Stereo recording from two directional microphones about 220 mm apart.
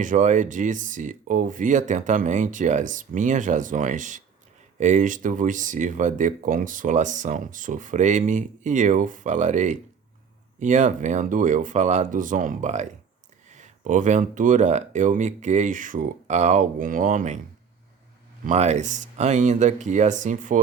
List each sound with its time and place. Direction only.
0.0 s speech: 35° right (ahead or behind)
18.4 s speech: 30° right (ahead or behind)